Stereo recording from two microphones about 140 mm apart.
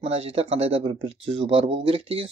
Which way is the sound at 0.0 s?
50° right (ahead or behind).